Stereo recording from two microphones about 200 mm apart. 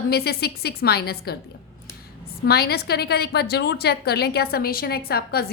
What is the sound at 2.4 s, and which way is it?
A woman's voice, 50° left (ahead or behind).